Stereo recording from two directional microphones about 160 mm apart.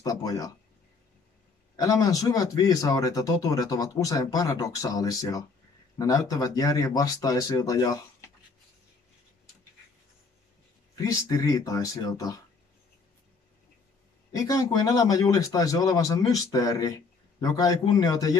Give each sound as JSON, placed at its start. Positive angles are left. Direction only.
{"t": 0.0, "sound": "speech", "side_deg": 20}
{"t": 1.8, "sound": "speech", "side_deg": 20}
{"t": 11.0, "sound": "speech", "side_deg": 20}
{"t": 14.3, "sound": "speech", "side_deg": 20}